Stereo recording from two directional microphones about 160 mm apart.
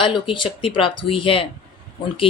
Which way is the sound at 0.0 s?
30° left (ahead or behind).